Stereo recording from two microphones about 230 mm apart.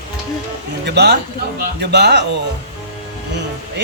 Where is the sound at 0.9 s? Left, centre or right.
Right.